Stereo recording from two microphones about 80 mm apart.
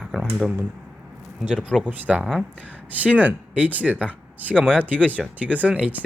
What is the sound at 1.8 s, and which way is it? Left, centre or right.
Speech, centre.